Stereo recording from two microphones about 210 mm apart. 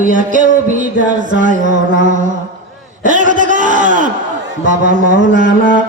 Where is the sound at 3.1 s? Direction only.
35° right (ahead or behind).